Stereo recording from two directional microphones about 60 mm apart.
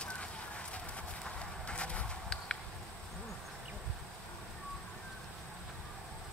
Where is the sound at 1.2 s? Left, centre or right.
Centre.